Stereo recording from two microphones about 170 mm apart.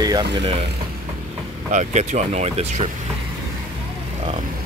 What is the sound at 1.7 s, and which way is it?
Speech, 45° right (ahead or behind).